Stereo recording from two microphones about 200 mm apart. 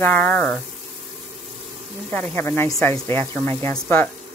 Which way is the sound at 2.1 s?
10° left (ahead or behind).